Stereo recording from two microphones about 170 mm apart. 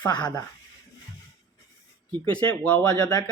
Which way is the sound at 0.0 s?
25° left (ahead or behind).